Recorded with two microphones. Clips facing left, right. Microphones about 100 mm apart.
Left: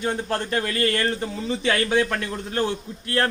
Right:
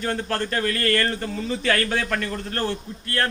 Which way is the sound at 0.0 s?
15° left (ahead or behind).